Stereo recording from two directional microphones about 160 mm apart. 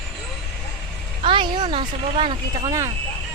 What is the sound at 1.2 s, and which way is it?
Speech, 30° right (ahead or behind).